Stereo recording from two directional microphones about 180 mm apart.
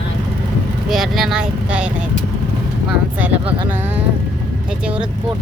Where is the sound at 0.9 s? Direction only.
Centre (ahead or behind).